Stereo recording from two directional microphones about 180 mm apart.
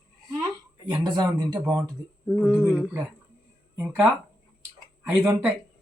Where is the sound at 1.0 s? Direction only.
25° right (ahead or behind).